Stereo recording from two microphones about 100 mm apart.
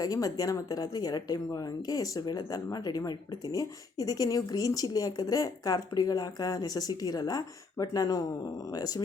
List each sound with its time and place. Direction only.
0.0 s speech: 35° left (ahead or behind)